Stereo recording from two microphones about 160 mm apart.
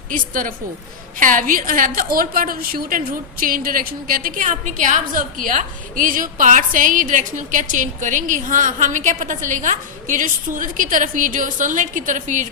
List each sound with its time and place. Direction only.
0.1 s a woman's voice: 55° right (ahead or behind)